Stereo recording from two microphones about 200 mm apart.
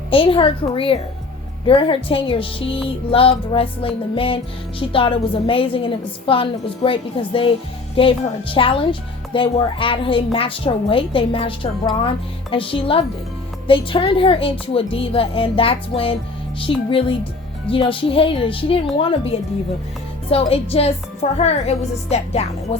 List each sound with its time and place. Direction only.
0.1 s speech: 25° left (ahead or behind)
20.3 s speech: 30° left (ahead or behind)